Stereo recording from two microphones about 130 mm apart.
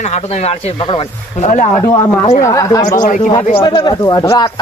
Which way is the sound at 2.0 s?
30° left (ahead or behind).